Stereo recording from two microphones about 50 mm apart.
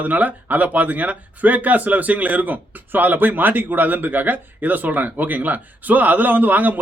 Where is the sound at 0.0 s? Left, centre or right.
Right.